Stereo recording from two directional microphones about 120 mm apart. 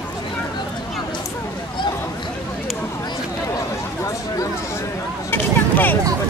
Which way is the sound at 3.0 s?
30° left (ahead or behind).